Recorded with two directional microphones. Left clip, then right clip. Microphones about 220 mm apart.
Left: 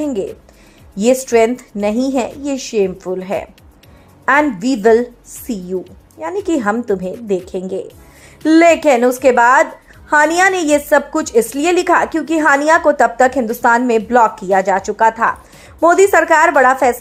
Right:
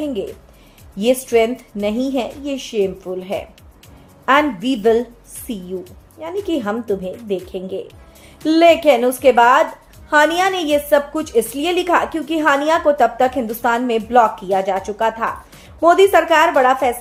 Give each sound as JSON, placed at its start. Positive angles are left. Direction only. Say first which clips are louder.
{"t": 0.9, "sound": "a woman's voice", "louder": "left 3 dB", "side_deg": 25}